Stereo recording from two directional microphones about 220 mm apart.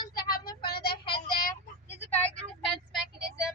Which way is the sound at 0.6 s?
45° left (ahead or behind).